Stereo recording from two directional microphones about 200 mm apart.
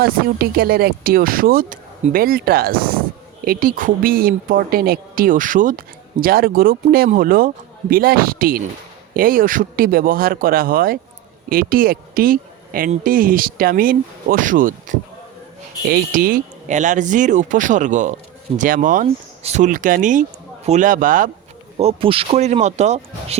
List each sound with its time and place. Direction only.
0.0 s speech: 50° right (ahead or behind)
21.8 s speech: 30° right (ahead or behind)